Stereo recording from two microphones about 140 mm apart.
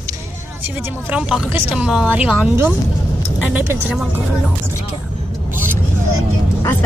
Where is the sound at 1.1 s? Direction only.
5° right (ahead or behind).